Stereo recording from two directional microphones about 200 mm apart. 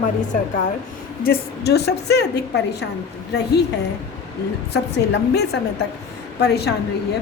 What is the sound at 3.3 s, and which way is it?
Speech, 55° left (ahead or behind).